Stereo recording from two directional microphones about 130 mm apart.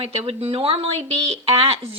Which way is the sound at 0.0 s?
45° right (ahead or behind).